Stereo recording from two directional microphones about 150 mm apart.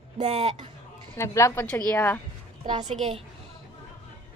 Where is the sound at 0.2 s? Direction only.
45° right (ahead or behind).